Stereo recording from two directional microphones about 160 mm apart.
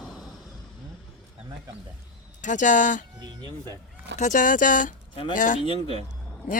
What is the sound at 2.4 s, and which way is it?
Speech, 50° left (ahead or behind).